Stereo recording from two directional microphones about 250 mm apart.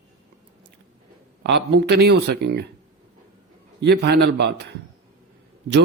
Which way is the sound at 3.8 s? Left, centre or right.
Right.